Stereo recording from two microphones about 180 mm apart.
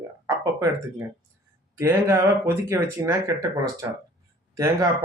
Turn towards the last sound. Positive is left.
turn(degrees=-20)  # may be behind; listen again after turning